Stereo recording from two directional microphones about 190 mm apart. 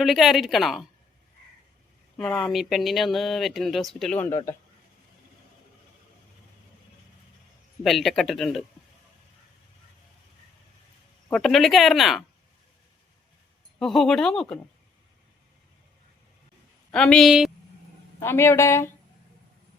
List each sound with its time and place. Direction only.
0.0 s speech: centre (ahead or behind)
2.1 s speech: centre (ahead or behind)
4.3 s a woman's voice: 15° left (ahead or behind)
7.9 s speech: centre (ahead or behind)
11.3 s speech: centre (ahead or behind)
13.7 s speech: centre (ahead or behind)
16.9 s speech: 5° left (ahead or behind)
18.2 s a woman's voice: 15° left (ahead or behind)